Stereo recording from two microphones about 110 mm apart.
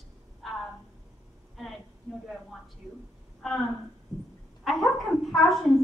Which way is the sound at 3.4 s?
Centre (ahead or behind).